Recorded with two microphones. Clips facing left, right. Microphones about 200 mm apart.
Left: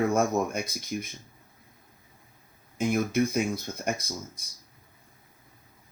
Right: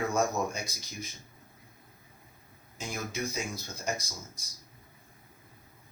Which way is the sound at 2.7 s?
55° left (ahead or behind).